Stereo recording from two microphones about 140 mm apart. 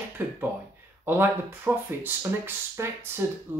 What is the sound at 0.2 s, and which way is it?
Speech, 15° right (ahead or behind).